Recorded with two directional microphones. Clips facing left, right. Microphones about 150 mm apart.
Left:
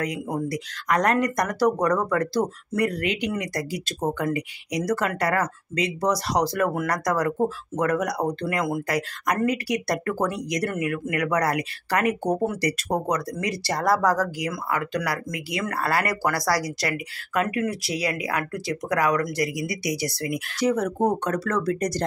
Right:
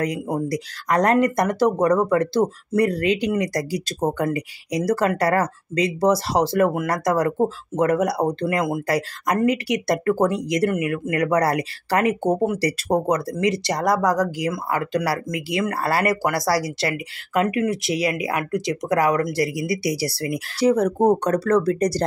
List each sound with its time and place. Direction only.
0.0 s speech: 35° right (ahead or behind); by 14.3 s 15° right (ahead or behind)
14.4 s speech: 30° right (ahead or behind)